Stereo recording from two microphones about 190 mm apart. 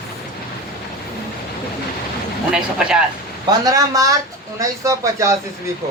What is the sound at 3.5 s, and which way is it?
Speech, 20° right (ahead or behind).